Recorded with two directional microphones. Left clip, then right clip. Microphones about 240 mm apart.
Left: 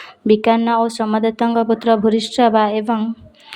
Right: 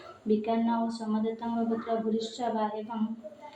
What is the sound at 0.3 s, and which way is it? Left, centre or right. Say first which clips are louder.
Speech: left 14 dB; left.